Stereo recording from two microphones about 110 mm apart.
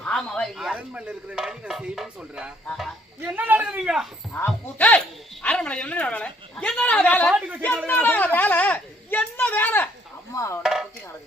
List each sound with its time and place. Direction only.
0.0 s speech: 5° left (ahead or behind)
0.7 s speech: 10° right (ahead or behind)
4.4 s speech: 10° left (ahead or behind)
10.6 s chopping: 5° right (ahead or behind)